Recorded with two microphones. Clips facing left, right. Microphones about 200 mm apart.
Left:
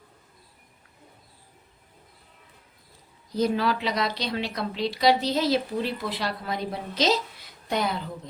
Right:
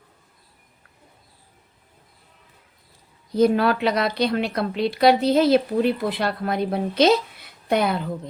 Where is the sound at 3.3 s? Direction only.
55° right (ahead or behind).